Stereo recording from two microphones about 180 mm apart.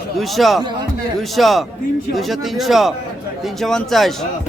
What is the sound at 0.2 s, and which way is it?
Speech, centre (ahead or behind).